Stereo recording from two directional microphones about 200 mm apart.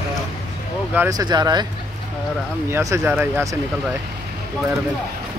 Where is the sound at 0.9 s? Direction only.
15° right (ahead or behind).